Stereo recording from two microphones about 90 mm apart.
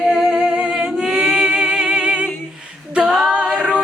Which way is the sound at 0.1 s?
5° right (ahead or behind).